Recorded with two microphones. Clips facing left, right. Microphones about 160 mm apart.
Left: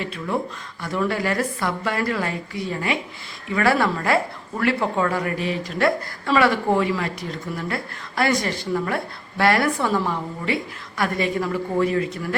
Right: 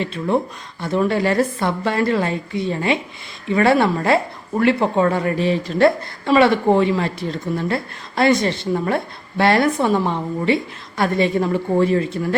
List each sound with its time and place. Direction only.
0.0 s speech: 25° right (ahead or behind)